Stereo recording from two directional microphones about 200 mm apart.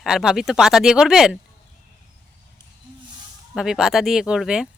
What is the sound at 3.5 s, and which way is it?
Speech, 5° right (ahead or behind).